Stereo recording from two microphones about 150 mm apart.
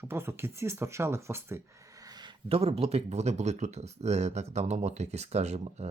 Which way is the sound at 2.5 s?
40° right (ahead or behind).